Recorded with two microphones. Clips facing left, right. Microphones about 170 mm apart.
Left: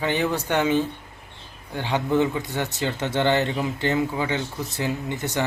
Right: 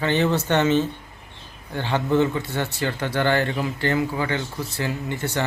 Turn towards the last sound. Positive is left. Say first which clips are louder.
# even
turn(degrees=15)  # may be behind; listen again after turning